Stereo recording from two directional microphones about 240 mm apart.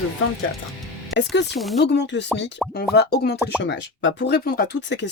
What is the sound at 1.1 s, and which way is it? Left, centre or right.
Speech, left.